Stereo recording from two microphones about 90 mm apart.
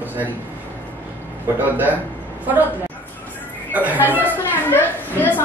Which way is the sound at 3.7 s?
20° right (ahead or behind).